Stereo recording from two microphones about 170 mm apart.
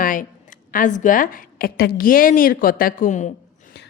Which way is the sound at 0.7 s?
50° left (ahead or behind).